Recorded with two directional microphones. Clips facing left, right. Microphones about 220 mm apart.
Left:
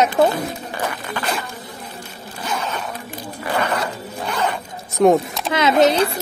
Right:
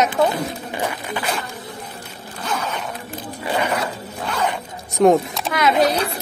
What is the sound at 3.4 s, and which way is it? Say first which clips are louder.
Speech: even; 15° right (ahead or behind).